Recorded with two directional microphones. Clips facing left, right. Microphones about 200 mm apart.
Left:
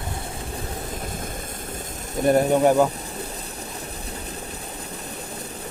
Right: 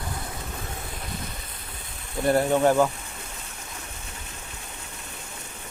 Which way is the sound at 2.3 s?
15° left (ahead or behind).